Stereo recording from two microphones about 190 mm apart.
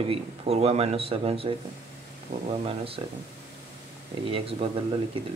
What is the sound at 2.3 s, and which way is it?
Speech, 40° right (ahead or behind).